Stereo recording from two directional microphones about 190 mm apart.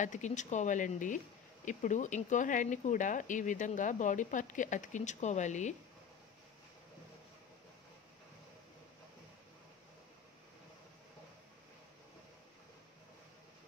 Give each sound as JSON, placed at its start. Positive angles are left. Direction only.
{"t": 0.0, "sound": "speech", "side_deg": 40}